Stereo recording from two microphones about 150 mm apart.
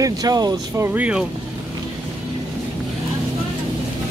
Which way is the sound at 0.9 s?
10° right (ahead or behind).